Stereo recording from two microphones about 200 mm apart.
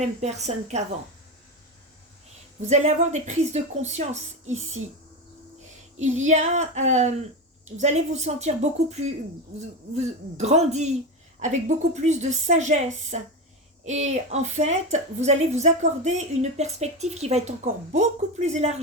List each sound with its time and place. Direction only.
0.0 s a woman's voice: 35° right (ahead or behind)
2.6 s a woman's voice: 35° right (ahead or behind)
6.0 s a woman's voice: 35° right (ahead or behind)
12.0 s a woman's voice: 35° right (ahead or behind)